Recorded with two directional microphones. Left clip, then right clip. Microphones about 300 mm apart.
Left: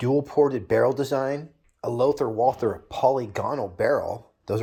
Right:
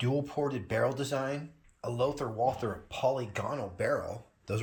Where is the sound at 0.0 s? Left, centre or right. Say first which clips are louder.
Left 11 dB; left.